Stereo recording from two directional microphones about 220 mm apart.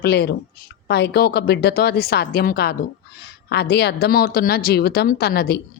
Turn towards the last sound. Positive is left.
turn(degrees=45)  # may be behind; listen again after turning